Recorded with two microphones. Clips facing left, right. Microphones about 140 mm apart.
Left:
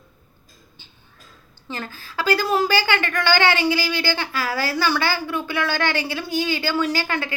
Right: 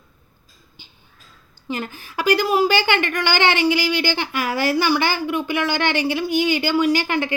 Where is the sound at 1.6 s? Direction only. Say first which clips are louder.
Right 5 dB; 15° right (ahead or behind).